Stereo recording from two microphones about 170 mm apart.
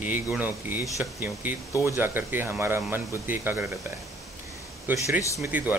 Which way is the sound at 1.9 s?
10° right (ahead or behind).